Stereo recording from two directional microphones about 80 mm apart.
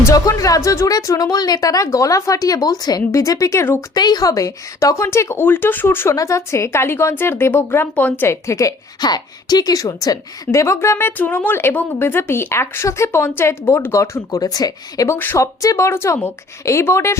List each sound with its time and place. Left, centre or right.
0.1 s a woman's voice: left
3.1 s a woman's voice: left
3.9 s a woman's voice: left
6.1 s a woman's voice: left
7.9 s speech: left
8.3 s a woman's voice: left
9.0 s a woman's voice: left
15.1 s speech: left
15.4 s a woman's voice: left